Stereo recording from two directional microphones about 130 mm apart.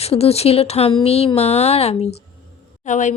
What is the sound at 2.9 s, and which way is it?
Speech, 70° left (ahead or behind).